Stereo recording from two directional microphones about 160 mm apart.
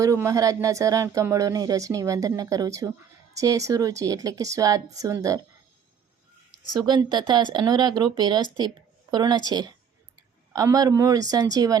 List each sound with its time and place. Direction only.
0.0 s speech: 20° right (ahead or behind)
6.8 s a woman's voice: 30° right (ahead or behind)